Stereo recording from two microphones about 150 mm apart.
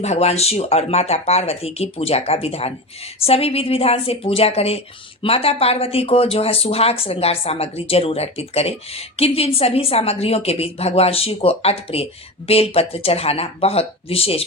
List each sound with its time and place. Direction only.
0.0 s speech: 45° left (ahead or behind)